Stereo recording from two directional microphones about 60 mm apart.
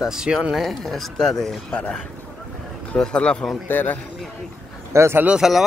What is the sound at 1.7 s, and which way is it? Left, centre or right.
Speech, centre.